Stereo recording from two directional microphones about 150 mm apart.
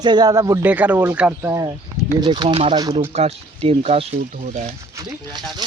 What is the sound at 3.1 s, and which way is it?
Speech, 45° right (ahead or behind).